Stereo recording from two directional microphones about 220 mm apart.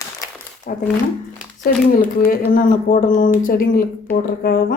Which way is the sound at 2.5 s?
35° left (ahead or behind).